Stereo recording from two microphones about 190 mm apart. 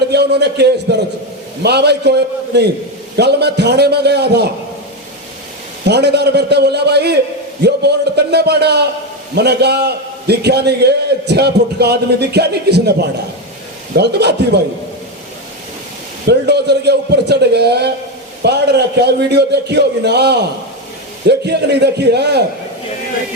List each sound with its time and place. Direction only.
0.1 s a man's voice: 60° right (ahead or behind)
5.8 s a man's voice: 60° right (ahead or behind)
16.2 s a man's voice: 60° right (ahead or behind)